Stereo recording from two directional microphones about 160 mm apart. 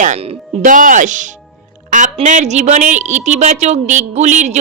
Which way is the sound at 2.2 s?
50° right (ahead or behind).